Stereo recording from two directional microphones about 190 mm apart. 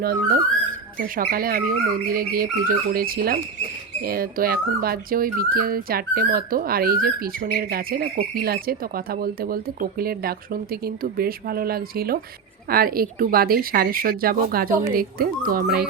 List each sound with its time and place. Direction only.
0.0 s speech: 55° right (ahead or behind)